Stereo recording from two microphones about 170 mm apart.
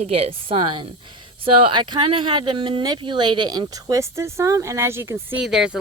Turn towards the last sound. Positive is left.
turn(degrees=-5)  # may be behind; listen again after turning